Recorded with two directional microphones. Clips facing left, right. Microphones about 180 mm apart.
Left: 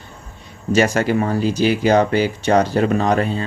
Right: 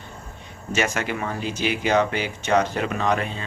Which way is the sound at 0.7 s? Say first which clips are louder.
Left 9 dB; 35° left (ahead or behind).